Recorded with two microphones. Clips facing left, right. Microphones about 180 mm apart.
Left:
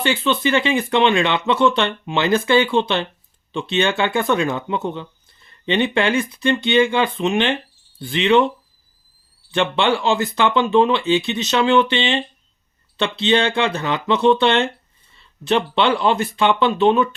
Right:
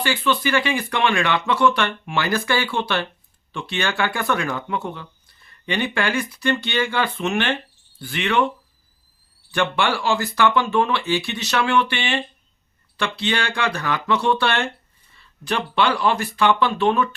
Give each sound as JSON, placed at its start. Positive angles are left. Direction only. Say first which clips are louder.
{"t": 0.0, "sound": "speech", "louder": "left 3 dB", "side_deg": 25}
{"t": 9.5, "sound": "speech", "louder": "left 3 dB", "side_deg": 20}